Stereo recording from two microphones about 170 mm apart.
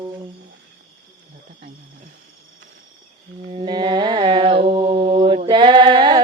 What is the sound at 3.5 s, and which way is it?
Mantra, 30° right (ahead or behind).